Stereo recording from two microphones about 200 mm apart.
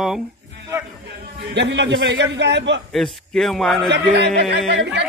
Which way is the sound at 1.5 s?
60° right (ahead or behind).